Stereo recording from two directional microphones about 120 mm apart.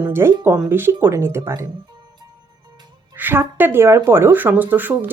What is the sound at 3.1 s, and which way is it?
A woman's voice, 15° right (ahead or behind).